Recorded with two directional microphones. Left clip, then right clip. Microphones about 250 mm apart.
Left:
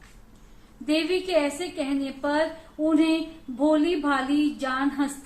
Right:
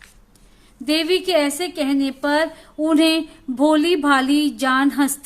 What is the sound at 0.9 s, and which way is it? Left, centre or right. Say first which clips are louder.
A woman's voice: right 6 dB; right.